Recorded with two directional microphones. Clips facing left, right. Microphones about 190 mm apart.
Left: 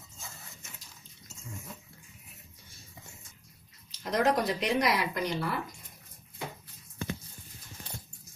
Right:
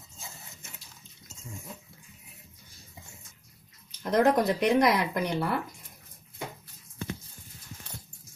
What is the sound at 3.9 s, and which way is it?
Speech, 55° right (ahead or behind).